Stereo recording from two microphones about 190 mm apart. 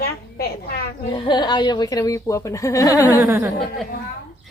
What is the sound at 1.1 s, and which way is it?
Speech, 25° left (ahead or behind).